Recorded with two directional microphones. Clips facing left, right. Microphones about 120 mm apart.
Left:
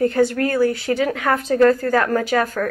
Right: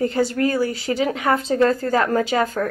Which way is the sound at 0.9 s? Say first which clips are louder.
Left 1 dB; 15° right (ahead or behind).